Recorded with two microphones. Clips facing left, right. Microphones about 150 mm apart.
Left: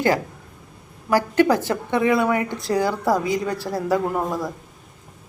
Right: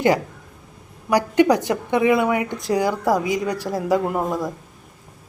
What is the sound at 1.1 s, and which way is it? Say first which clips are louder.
A woman's voice: right 1 dB; 20° right (ahead or behind).